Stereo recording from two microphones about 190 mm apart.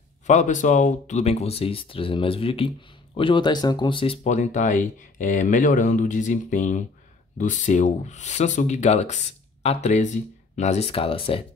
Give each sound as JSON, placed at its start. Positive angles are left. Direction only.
{"t": 0.3, "sound": "speech", "side_deg": 40}